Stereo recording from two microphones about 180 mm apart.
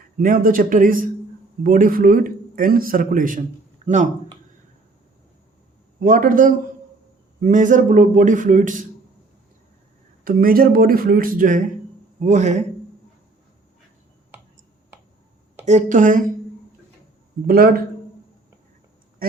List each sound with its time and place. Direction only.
0.2 s a man's voice: 50° right (ahead or behind)
3.8 s a sound: 40° right (ahead or behind)
6.0 s a man's voice: 45° right (ahead or behind)
10.2 s a man's voice: 55° right (ahead or behind)
15.6 s a man's voice: 45° right (ahead or behind)
17.4 s a man's voice: 55° right (ahead or behind)